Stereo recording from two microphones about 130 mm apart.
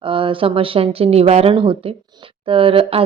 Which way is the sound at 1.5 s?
40° right (ahead or behind).